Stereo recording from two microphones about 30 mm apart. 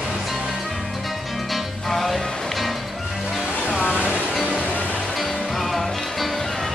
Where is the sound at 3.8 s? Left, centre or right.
Right.